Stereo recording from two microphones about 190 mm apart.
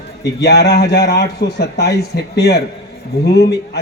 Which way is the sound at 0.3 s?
60° left (ahead or behind).